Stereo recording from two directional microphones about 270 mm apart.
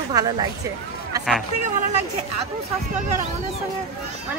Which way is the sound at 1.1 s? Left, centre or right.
Centre.